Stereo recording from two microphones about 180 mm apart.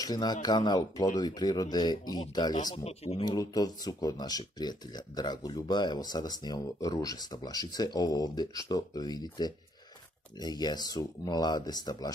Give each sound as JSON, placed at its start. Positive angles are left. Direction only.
{"t": 0.0, "sound": "speech", "side_deg": 20}